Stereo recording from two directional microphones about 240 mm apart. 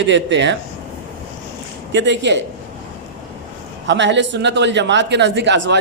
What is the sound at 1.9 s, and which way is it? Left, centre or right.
Speech, right.